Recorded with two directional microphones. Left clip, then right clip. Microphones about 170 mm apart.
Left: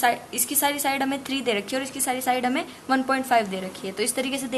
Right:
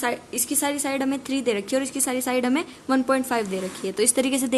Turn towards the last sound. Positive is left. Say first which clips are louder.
# right 4 dB
turn(degrees=-45)  # may be behind; listen again after turning